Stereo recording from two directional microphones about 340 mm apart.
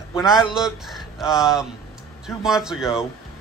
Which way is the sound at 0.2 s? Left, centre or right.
Centre.